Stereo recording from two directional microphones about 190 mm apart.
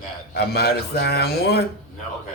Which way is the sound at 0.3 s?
55° left (ahead or behind).